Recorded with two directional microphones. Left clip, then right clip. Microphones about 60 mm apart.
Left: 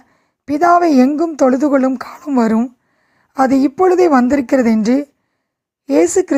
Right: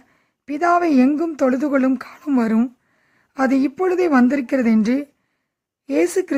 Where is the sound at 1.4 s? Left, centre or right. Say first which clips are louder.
Left 7 dB; left.